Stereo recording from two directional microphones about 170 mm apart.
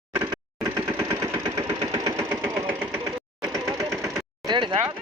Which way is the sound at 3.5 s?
20° right (ahead or behind).